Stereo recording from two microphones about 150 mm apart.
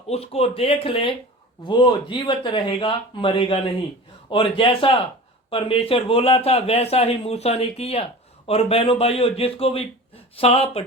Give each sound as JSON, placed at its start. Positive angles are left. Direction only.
{"t": 0.1, "sound": "speech", "side_deg": 40}